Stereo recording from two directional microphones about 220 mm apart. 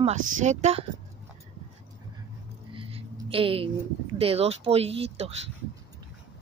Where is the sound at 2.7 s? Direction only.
25° right (ahead or behind).